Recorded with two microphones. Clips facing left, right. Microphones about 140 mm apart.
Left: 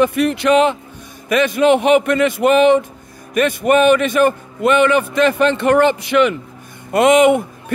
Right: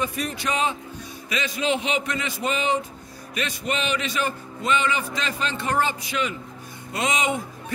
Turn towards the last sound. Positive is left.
turn(degrees=60)  # may be behind; listen again after turning